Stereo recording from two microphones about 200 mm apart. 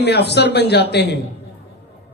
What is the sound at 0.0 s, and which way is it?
Speech, 55° left (ahead or behind).